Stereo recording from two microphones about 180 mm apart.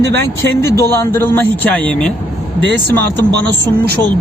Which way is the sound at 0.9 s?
15° left (ahead or behind).